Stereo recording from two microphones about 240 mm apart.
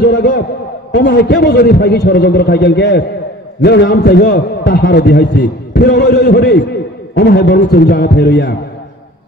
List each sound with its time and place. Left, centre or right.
0.0 s a man's voice: left